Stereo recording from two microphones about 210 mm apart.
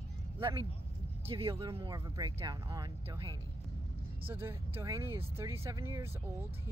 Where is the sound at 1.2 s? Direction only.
25° right (ahead or behind).